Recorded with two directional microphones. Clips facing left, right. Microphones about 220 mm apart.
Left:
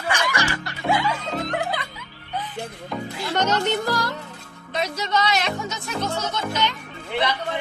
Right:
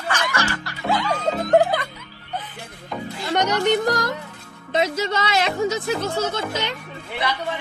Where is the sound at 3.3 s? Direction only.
15° right (ahead or behind).